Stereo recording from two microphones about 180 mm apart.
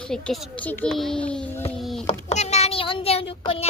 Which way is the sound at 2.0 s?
40° left (ahead or behind).